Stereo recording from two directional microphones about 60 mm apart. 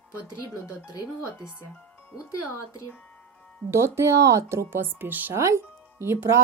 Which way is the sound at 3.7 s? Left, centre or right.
Right.